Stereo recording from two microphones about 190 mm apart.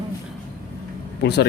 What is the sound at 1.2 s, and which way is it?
Speech, 60° left (ahead or behind).